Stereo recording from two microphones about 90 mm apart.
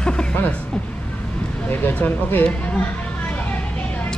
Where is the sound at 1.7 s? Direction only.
20° left (ahead or behind).